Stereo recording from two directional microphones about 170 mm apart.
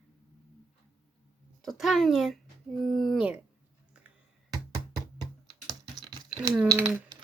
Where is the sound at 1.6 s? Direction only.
Centre (ahead or behind).